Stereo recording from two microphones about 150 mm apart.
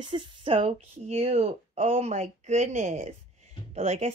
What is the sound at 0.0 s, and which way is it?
A woman's voice, 35° right (ahead or behind).